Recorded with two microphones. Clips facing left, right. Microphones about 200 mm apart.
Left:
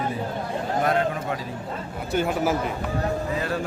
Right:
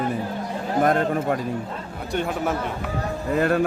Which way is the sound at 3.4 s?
55° right (ahead or behind).